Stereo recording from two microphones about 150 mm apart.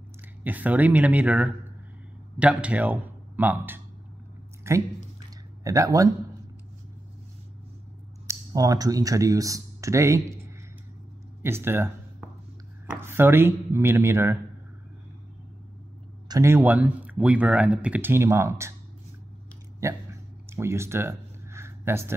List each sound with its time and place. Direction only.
0.4 s speech: 10° right (ahead or behind)
8.3 s speech: 25° right (ahead or behind)
16.3 s speech: 20° right (ahead or behind)
19.8 s a sound: 20° right (ahead or behind)